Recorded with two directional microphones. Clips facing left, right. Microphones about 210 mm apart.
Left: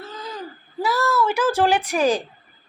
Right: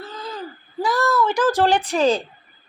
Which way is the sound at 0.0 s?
10° left (ahead or behind).